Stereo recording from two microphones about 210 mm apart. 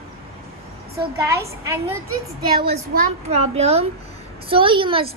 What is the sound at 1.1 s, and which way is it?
Speech, 15° right (ahead or behind).